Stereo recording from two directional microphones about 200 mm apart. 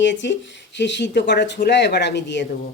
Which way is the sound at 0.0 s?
60° left (ahead or behind).